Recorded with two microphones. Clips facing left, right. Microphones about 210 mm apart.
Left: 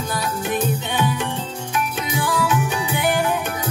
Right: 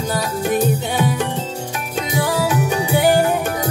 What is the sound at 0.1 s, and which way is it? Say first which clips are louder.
Music: right 5 dB; 40° right (ahead or behind).